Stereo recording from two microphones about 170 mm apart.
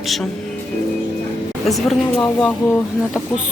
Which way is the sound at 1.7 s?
Centre (ahead or behind).